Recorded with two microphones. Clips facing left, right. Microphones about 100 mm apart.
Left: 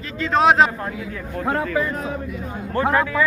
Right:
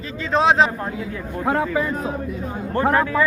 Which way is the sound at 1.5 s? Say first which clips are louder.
Right 1 dB; 20° right (ahead or behind).